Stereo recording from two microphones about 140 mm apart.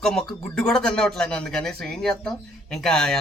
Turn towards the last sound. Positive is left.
turn(degrees=5)  # may be behind; listen again after turning